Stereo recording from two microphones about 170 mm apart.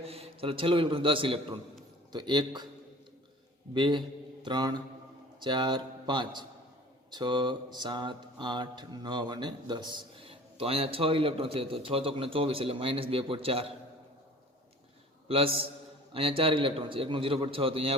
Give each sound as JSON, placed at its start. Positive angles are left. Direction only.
{"t": 0.0, "sound": "a man's voice", "side_deg": -35}
{"t": 3.8, "sound": "a man's voice", "side_deg": -30}
{"t": 7.1, "sound": "mantra", "side_deg": -25}
{"t": 15.3, "sound": "mantra", "side_deg": -35}